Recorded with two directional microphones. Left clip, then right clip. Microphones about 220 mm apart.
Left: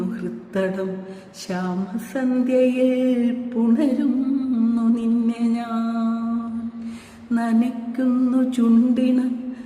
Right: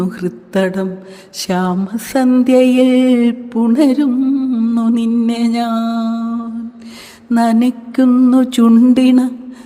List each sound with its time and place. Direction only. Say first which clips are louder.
0.2 s music: right 8 dB; 45° right (ahead or behind)
1.4 s a sound: right 11 dB; 45° right (ahead or behind)
7.3 s music: right 9 dB; 45° right (ahead or behind)